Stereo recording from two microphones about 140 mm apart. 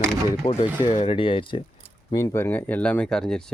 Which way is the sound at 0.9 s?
40° left (ahead or behind).